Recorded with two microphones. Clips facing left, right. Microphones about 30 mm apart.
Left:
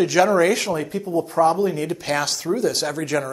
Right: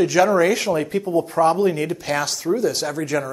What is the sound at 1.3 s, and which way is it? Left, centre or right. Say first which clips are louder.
Speech: left 1 dB; centre.